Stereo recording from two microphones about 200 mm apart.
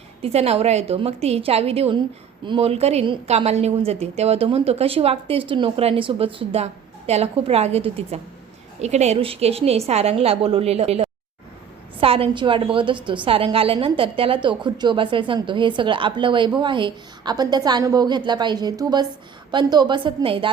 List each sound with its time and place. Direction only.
0.2 s a woman's voice: 30° right (ahead or behind)